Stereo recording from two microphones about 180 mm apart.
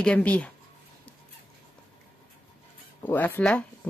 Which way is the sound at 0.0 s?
5° left (ahead or behind).